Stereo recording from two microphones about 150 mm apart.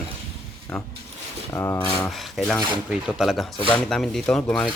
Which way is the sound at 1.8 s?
5° left (ahead or behind).